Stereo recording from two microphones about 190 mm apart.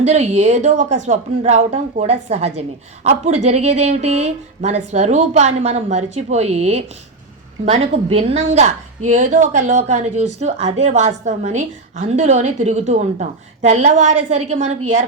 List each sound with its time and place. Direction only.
0.0 s speech: 35° right (ahead or behind)